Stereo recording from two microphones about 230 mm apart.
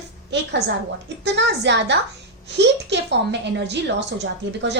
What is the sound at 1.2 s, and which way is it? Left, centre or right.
A woman's voice, right.